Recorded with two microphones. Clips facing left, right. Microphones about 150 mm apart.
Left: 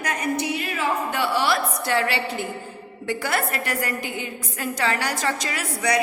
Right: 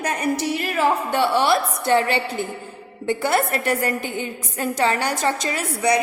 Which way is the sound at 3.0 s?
25° right (ahead or behind).